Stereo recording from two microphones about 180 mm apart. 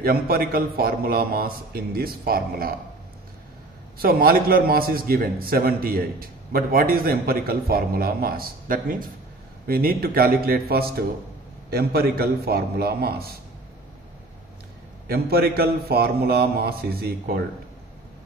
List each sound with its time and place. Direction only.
0.0 s a man's voice: 55° right (ahead or behind)
4.0 s a man's voice: 55° right (ahead or behind)
15.0 s a man's voice: 60° right (ahead or behind)